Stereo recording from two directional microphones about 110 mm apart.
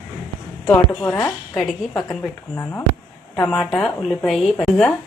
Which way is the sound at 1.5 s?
Centre (ahead or behind).